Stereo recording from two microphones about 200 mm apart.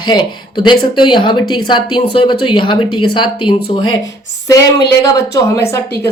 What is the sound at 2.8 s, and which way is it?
Speech, 90° left.